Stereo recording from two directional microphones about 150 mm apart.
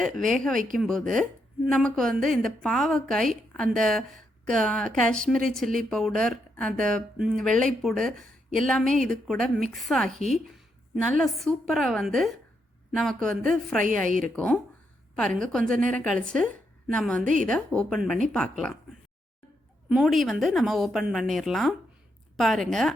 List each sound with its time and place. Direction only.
0.0 s a woman's voice: centre (ahead or behind)
8.1 s speech: 65° right (ahead or behind)
8.6 s a woman's voice: 5° left (ahead or behind)
11.2 s a woman's voice: centre (ahead or behind)
13.8 s a woman's voice: 60° right (ahead or behind)
15.1 s a woman's voice: 5° left (ahead or behind)
19.9 s a woman's voice: 5° right (ahead or behind)